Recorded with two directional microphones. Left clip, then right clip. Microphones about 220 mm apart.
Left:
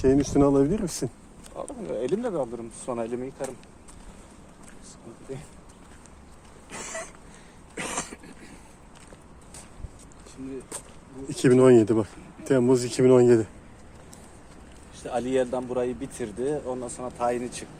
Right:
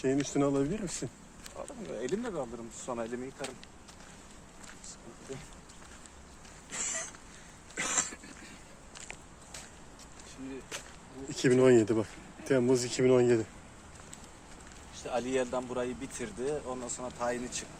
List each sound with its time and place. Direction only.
0.0 s speech: 35° left (ahead or behind)
6.7 s a sound: 45° left (ahead or behind)
7.8 s cough: 50° left (ahead or behind)
11.3 s speech: 20° left (ahead or behind)
14.9 s speech: 50° left (ahead or behind)